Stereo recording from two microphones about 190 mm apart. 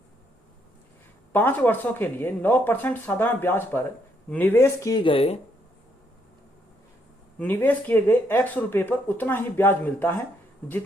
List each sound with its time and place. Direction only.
1.3 s speech: 10° left (ahead or behind); by 5.4 s 30° left (ahead or behind)
7.3 s speech: 10° left (ahead or behind)